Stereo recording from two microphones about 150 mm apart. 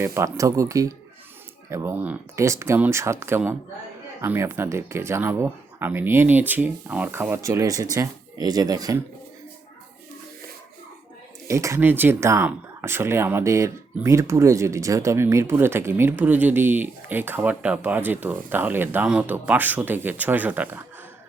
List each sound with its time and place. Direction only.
0.0 s speech: 20° right (ahead or behind)
11.4 s speech: 20° right (ahead or behind)